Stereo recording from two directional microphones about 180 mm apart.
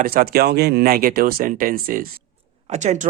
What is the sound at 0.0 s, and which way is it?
Speech, 55° right (ahead or behind).